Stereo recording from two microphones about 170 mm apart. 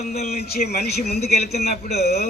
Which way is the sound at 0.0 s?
40° left (ahead or behind).